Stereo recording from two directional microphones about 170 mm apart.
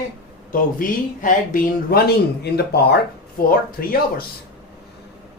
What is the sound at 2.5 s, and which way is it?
Speech, 70° left (ahead or behind).